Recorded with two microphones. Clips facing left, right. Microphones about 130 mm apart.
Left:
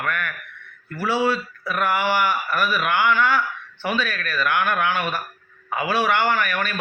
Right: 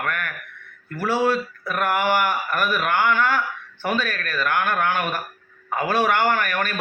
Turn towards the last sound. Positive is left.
turn(degrees=-45)  # may be behind; listen again after turning